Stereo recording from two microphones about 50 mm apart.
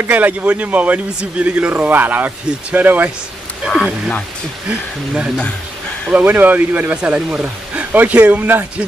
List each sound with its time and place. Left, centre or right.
0.0 s speech: right
3.6 s speech: centre
4.6 s speech: right
6.1 s speech: right
7.0 s speech: right
7.4 s a sound: right
8.1 s speech: right